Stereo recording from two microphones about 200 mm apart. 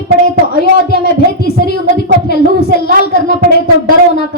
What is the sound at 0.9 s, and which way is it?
A woman's voice, 55° left (ahead or behind).